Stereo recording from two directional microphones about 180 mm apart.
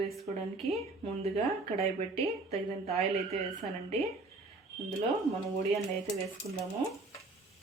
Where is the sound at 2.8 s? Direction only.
35° right (ahead or behind).